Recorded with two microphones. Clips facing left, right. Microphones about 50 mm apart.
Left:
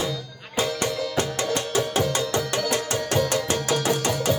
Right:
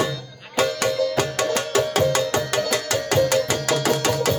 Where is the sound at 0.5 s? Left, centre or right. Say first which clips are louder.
Right 4 dB; right.